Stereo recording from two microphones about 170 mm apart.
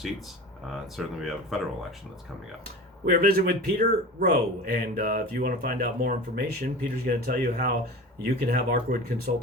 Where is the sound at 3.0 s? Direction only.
65° right (ahead or behind).